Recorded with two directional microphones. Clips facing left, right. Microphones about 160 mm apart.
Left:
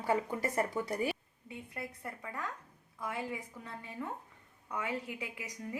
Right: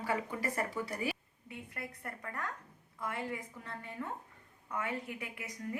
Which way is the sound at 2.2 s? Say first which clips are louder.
Even; 10° left (ahead or behind).